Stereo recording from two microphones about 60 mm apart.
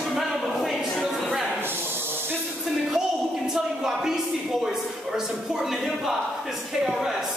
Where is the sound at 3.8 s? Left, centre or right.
Centre.